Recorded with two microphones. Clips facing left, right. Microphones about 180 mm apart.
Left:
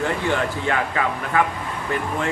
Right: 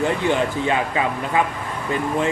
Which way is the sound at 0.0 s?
20° right (ahead or behind).